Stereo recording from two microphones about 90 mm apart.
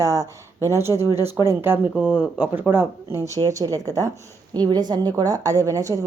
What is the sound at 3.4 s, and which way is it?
Speech, 40° right (ahead or behind).